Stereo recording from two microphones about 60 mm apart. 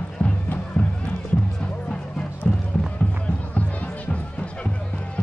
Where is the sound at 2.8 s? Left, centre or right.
Left.